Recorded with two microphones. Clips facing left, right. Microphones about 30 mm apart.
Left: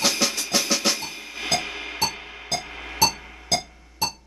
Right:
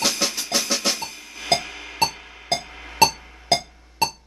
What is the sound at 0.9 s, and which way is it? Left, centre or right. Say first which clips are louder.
Train: left 1 dB; centre.